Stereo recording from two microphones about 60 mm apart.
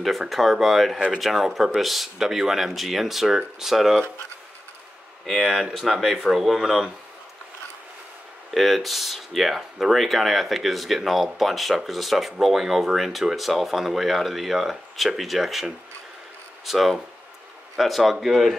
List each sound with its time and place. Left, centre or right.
0.0 s speech: centre
5.2 s speech: centre
8.5 s speech: centre